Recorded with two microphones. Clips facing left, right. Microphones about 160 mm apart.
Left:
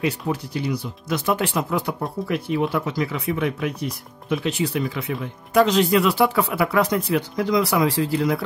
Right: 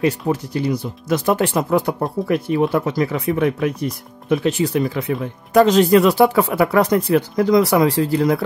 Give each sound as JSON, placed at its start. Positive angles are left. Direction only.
{"t": 0.0, "sound": "speech", "side_deg": -45}